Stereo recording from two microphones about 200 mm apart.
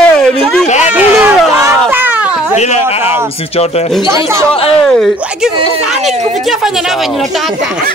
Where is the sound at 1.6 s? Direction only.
10° right (ahead or behind).